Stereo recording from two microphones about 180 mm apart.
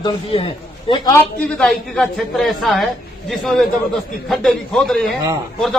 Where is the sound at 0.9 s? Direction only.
15° left (ahead or behind).